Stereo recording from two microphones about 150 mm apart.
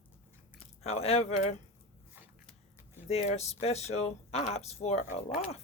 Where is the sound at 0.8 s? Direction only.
45° left (ahead or behind).